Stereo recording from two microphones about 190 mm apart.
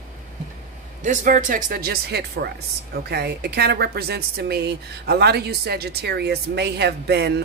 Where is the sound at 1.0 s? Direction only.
40° right (ahead or behind); by 7.4 s 60° right (ahead or behind).